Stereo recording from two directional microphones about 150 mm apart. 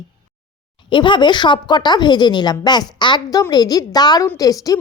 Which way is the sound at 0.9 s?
30° left (ahead or behind).